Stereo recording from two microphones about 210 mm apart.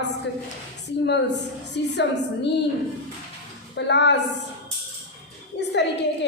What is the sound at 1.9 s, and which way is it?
Speech, 55° left (ahead or behind).